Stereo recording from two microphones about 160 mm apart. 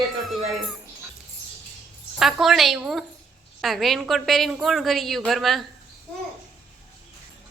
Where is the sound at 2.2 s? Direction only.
Centre (ahead or behind).